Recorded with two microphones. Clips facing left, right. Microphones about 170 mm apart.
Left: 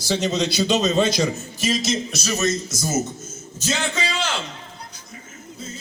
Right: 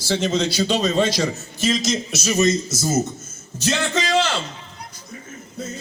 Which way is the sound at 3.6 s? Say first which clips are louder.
Right 3 dB; 75° right (ahead or behind).